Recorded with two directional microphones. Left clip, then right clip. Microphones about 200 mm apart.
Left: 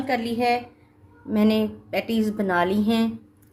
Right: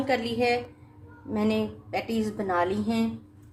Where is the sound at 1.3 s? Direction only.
35° left (ahead or behind).